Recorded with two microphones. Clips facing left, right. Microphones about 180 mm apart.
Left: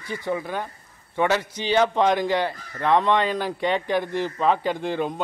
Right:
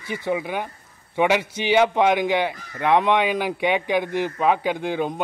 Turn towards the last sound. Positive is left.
turn(degrees=-5)  # may be behind; listen again after turning